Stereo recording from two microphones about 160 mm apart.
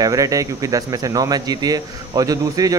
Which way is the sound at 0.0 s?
20° right (ahead or behind).